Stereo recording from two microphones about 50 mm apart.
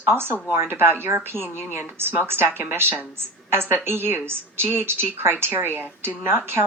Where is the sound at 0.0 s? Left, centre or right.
Right.